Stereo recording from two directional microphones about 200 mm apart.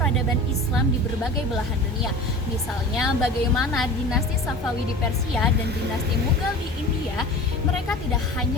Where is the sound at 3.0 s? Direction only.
Centre (ahead or behind).